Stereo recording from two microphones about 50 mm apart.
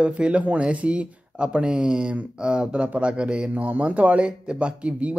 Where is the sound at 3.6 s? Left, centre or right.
Right.